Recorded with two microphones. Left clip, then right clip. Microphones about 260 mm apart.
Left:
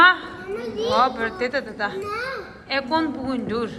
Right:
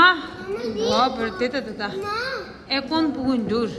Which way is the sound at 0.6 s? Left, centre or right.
Centre.